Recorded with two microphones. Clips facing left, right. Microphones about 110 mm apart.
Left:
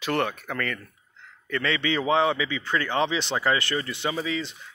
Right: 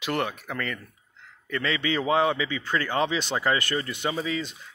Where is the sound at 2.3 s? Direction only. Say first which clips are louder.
Even; 40° right (ahead or behind).